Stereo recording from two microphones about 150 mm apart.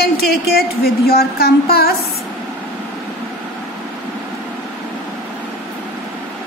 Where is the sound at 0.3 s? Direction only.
90° left.